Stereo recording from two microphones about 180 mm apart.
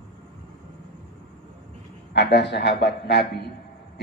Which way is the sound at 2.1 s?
65° left (ahead or behind).